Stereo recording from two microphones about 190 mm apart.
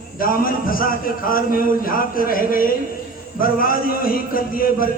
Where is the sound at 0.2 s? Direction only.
50° left (ahead or behind).